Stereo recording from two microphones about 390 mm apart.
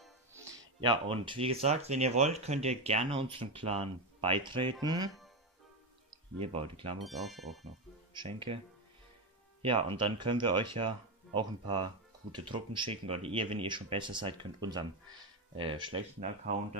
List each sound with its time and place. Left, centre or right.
0.0 s speech: centre
6.3 s speech: centre
7.0 s speech: centre
8.1 s speech: centre
9.6 s speech: centre